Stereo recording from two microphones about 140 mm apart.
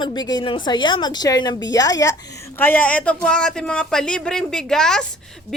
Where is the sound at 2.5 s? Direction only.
15° left (ahead or behind).